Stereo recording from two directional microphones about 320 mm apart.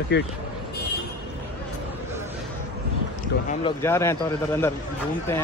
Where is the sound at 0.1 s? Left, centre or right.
Left.